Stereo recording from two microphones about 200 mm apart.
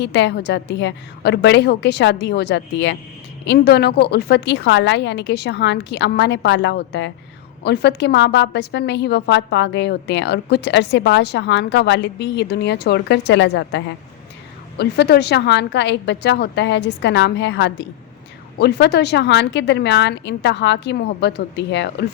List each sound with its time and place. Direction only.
0.0 s a woman's voice: 60° left (ahead or behind)